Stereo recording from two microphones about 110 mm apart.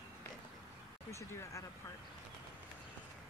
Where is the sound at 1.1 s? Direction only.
30° left (ahead or behind).